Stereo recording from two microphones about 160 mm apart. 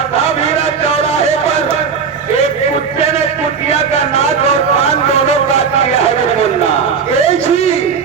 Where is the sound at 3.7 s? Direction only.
40° left (ahead or behind).